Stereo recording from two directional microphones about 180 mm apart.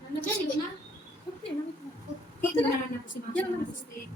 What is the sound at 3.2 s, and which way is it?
Speech, 60° left (ahead or behind).